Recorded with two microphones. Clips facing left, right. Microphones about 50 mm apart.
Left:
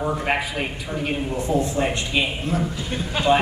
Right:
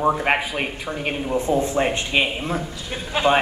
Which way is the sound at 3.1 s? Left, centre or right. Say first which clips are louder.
Right 4 dB; centre.